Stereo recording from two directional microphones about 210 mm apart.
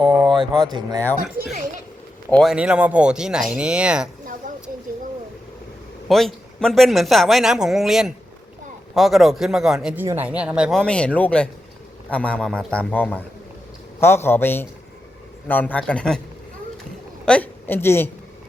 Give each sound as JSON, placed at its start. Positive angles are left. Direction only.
{"t": 0.6, "sound": "speech", "side_deg": -20}
{"t": 2.3, "sound": "speech", "side_deg": 0}
{"t": 4.4, "sound": "a sound", "side_deg": -40}
{"t": 6.1, "sound": "a man's voice", "side_deg": 0}
{"t": 17.2, "sound": "a woman's voice", "side_deg": 5}